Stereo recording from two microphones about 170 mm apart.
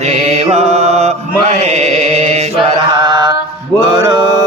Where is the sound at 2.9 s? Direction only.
25° right (ahead or behind).